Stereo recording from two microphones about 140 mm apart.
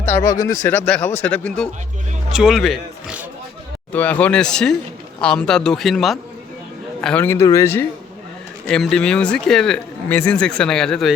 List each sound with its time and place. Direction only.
0.0 s speech: 20° left (ahead or behind)
2.3 s speech: 5° right (ahead or behind)
3.9 s speech: 10° left (ahead or behind)
8.6 s speech: 5° left (ahead or behind)